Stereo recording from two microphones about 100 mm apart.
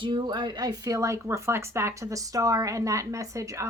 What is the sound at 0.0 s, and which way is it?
A woman's voice, 55° right (ahead or behind).